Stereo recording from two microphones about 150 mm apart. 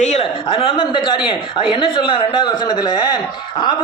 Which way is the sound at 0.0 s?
50° left (ahead or behind).